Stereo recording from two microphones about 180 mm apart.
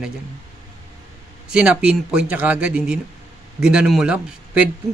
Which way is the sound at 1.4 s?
5° right (ahead or behind).